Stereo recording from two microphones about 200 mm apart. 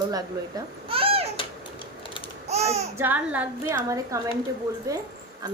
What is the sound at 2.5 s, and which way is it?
Babbling, 35° right (ahead or behind).